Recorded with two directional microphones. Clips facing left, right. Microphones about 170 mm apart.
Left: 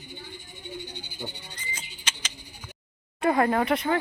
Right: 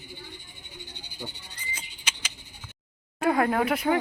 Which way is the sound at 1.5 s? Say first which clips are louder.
Left 1 dB; 10° right (ahead or behind).